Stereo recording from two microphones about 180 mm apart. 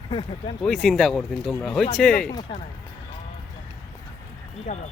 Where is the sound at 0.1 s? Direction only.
25° left (ahead or behind).